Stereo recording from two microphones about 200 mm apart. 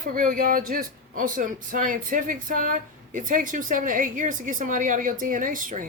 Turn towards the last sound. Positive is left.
turn(degrees=-40)  # may be behind; listen again after turning